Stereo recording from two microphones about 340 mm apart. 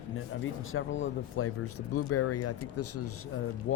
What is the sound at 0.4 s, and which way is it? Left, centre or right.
Speech, left.